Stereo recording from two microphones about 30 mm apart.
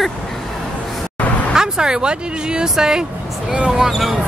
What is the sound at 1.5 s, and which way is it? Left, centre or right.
Speech, right.